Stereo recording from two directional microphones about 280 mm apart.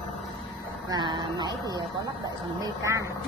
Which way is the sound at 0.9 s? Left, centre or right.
Centre.